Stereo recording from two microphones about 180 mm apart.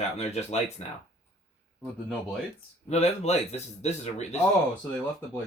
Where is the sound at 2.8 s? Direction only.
35° left (ahead or behind).